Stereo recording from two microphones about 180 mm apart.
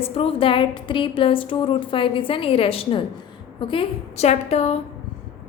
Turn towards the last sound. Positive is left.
turn(degrees=35)  # may be behind; listen again after turning